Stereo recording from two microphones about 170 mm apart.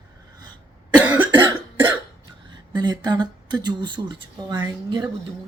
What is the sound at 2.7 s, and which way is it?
Speech, 25° right (ahead or behind).